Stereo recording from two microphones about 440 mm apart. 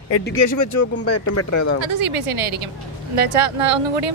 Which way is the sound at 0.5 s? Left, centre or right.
Left.